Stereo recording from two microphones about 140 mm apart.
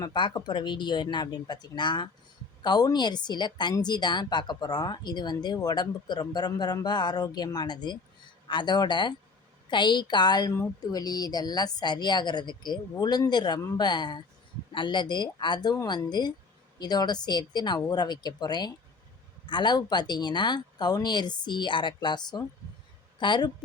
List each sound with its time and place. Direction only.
0.0 s a woman's voice: 35° left (ahead or behind)